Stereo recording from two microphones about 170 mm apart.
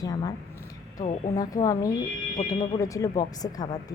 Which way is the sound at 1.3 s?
20° left (ahead or behind).